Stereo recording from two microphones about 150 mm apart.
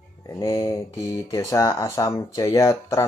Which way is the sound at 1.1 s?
20° left (ahead or behind).